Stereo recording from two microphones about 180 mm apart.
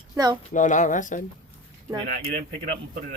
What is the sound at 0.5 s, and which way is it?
Speech, 45° left (ahead or behind).